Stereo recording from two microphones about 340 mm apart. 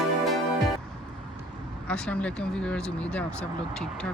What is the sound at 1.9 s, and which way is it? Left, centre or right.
Speech, centre.